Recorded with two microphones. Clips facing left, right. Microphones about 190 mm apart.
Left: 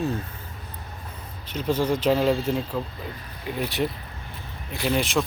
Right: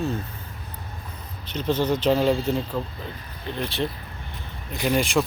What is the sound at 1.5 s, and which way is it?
Speech, 10° left (ahead or behind).